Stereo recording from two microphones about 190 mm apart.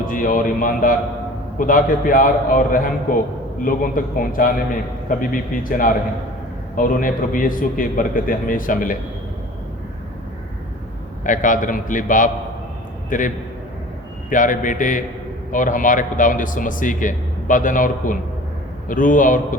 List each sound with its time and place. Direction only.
0.1 s a man's voice: 45° left (ahead or behind)
11.2 s a man's voice: 45° left (ahead or behind)